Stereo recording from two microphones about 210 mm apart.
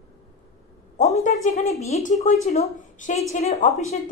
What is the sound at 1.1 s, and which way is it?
A woman's voice, 30° left (ahead or behind).